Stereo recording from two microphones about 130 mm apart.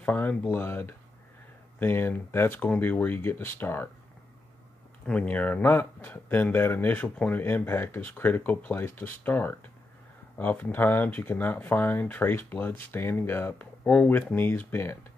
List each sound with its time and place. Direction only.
0.0 s speech: 10° left (ahead or behind)
5.0 s speech: 10° left (ahead or behind)